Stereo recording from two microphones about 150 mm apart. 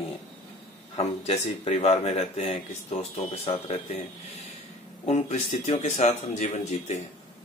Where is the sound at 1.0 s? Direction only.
45° left (ahead or behind).